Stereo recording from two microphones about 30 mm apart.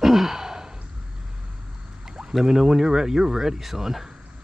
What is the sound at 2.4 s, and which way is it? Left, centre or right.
Speech, centre.